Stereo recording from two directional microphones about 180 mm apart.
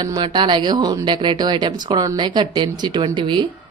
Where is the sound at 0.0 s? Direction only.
25° right (ahead or behind).